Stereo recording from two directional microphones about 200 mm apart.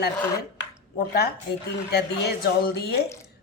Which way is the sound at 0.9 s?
50° left (ahead or behind).